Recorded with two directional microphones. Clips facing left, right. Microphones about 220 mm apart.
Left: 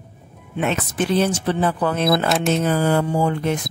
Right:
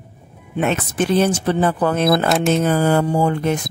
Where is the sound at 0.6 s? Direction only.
50° right (ahead or behind).